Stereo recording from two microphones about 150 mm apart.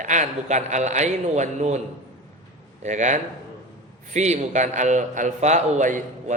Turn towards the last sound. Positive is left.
turn(degrees=-55)  # may be behind; listen again after turning